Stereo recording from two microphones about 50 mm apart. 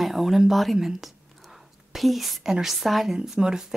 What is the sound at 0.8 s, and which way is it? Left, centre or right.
Whispering, centre.